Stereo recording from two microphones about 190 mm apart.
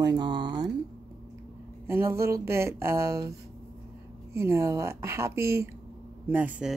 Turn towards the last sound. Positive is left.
turn(degrees=-10)  # may be behind; listen again after turning